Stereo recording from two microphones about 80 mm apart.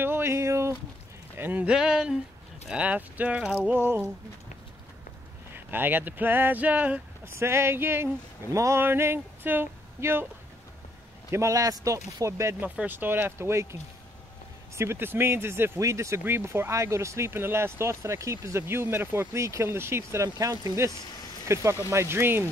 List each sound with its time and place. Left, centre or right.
0.0 s a sound: right
1.4 s speech: right
1.7 s speech: centre
5.5 s speech: right
7.3 s speech: right
8.8 s a sound: right
11.3 s speech: right
12.5 s speech: centre; by 13.7 s right
14.8 s speech: right